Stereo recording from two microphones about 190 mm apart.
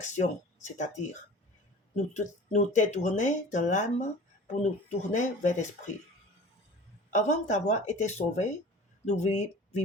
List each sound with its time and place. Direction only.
0.0 s speech: 40° left (ahead or behind)
7.1 s speech: 40° left (ahead or behind)